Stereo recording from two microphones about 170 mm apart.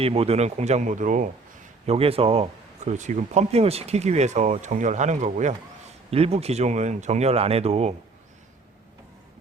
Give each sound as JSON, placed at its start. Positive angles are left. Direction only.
{"t": 0.0, "sound": "speech", "side_deg": -35}
{"t": 1.9, "sound": "speech", "side_deg": -35}